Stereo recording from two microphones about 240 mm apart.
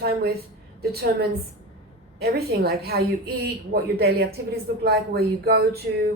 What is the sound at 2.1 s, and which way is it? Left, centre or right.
Speech, right.